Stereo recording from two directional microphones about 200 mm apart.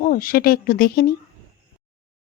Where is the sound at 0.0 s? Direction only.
45° left (ahead or behind).